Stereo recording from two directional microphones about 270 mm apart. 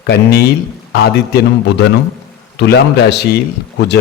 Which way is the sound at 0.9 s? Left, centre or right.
Left.